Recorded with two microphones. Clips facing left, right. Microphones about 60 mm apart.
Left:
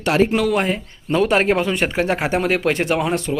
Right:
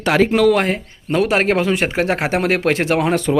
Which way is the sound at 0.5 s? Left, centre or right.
Right.